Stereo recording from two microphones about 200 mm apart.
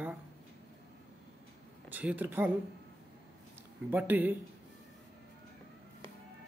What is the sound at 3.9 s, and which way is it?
Speech, 10° right (ahead or behind).